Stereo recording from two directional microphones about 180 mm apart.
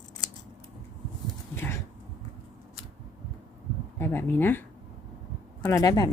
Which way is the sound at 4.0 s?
10° left (ahead or behind).